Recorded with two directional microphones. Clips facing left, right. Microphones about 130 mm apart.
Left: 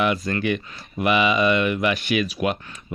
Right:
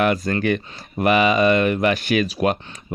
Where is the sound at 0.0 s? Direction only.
50° right (ahead or behind).